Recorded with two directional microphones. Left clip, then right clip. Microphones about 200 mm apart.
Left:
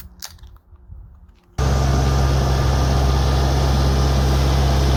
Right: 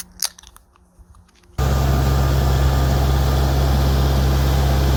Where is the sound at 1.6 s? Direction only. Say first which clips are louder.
Even; 35° right (ahead or behind).